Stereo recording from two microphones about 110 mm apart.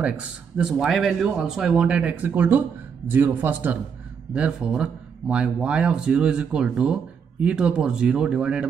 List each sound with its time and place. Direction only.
0.6 s speech: 5° right (ahead or behind)